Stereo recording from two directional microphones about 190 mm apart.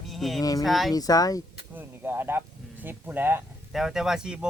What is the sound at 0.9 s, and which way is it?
Speech, 20° left (ahead or behind).